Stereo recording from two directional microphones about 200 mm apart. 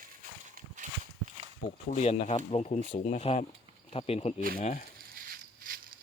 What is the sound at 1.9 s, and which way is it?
Speech, 35° left (ahead or behind).